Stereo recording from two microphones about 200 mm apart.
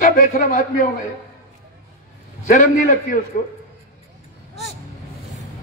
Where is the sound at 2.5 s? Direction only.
40° left (ahead or behind).